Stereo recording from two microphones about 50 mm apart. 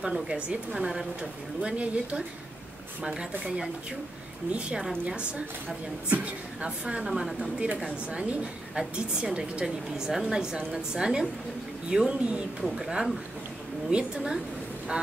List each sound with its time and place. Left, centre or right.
0.0 s a woman's voice: centre
4.5 s speech: right
6.0 s speech: right
6.6 s speech: right
7.1 s a woman's voice: centre
7.6 s a woman's voice: right
12.6 s speech: centre
13.8 s a woman's voice: centre